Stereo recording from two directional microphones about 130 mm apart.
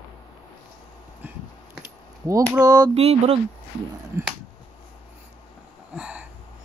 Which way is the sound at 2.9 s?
50° right (ahead or behind).